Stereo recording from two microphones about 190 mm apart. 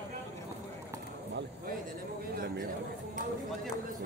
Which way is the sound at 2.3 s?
50° right (ahead or behind).